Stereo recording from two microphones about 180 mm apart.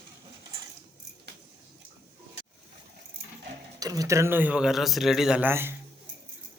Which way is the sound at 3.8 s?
20° right (ahead or behind).